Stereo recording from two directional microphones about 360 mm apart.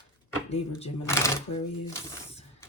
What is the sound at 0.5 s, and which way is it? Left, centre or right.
Speech, centre.